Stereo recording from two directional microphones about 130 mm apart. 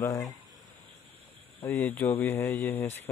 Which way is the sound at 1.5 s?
15° left (ahead or behind).